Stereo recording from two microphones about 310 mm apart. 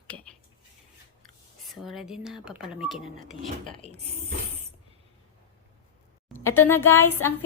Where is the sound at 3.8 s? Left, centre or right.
Right.